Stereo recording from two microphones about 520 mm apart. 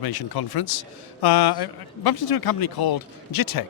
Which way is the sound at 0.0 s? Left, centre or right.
Left.